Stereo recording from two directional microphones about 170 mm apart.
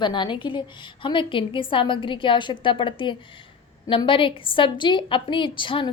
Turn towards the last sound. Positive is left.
turn(degrees=30)  # may be behind; listen again after turning